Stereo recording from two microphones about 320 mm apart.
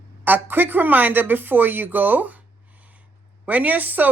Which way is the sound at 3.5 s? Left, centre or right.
Centre.